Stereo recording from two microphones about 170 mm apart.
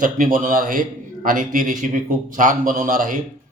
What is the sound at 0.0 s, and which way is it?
A man's voice, 55° right (ahead or behind).